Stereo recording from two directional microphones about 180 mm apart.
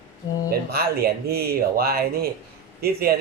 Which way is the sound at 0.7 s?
55° right (ahead or behind).